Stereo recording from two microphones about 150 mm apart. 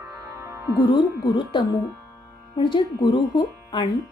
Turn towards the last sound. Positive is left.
turn(degrees=30)  # may be behind; listen again after turning